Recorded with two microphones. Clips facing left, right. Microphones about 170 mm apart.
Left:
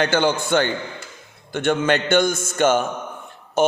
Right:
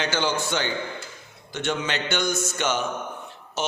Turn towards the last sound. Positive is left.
turn(degrees=55)  # may be behind; listen again after turning